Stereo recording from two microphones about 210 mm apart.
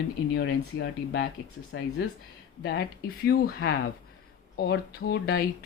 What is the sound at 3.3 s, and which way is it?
Speech, 45° left (ahead or behind).